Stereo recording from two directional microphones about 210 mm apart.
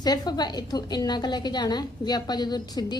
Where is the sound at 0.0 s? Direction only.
20° left (ahead or behind).